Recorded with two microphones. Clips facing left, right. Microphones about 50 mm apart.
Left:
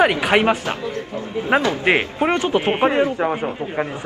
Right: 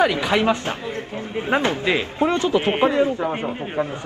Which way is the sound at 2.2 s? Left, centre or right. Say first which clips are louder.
Right 1 dB; left.